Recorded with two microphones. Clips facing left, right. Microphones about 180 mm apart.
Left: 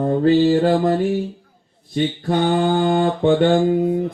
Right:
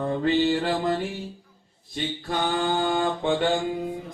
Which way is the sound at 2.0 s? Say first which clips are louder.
Left 9 dB; 55° left (ahead or behind).